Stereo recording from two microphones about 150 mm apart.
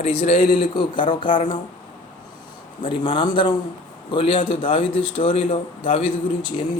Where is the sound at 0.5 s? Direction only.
35° left (ahead or behind).